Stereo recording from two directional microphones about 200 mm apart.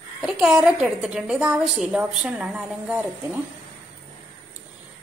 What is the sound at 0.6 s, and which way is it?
A woman's voice, 5° right (ahead or behind).